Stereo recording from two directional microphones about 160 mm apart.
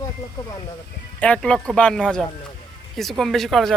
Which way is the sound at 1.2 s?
10° left (ahead or behind).